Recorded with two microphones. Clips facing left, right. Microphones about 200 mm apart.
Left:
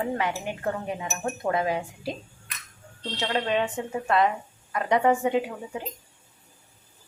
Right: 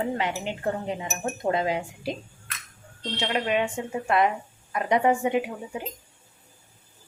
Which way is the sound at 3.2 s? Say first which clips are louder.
Even; 15° right (ahead or behind).